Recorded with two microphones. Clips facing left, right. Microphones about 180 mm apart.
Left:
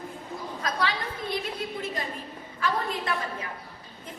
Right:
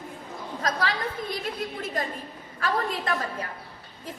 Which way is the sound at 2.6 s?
45° right (ahead or behind).